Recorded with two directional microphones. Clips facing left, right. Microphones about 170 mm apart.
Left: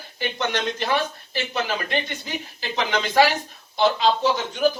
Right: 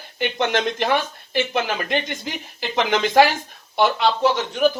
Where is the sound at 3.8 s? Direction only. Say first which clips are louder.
Right 1 dB; 70° right (ahead or behind).